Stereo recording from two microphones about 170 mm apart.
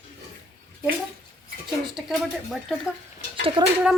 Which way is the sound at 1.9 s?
Centre (ahead or behind).